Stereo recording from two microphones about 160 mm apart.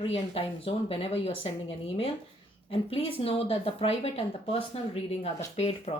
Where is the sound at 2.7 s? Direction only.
35° left (ahead or behind).